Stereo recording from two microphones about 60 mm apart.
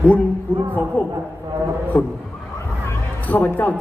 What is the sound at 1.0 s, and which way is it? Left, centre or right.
A man's voice, left.